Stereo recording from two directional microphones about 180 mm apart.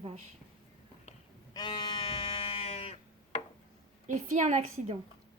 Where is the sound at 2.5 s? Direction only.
35° left (ahead or behind).